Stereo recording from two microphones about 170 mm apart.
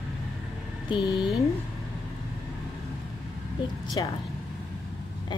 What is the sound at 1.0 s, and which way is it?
Speech, centre (ahead or behind).